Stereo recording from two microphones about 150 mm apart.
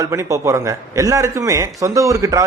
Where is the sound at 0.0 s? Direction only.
20° right (ahead or behind).